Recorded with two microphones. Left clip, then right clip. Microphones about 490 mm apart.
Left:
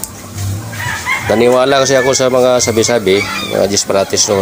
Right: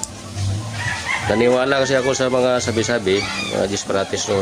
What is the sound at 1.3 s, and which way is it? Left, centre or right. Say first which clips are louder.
Speech: left 7 dB; right.